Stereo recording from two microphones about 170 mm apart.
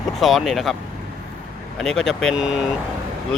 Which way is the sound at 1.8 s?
Centre (ahead or behind).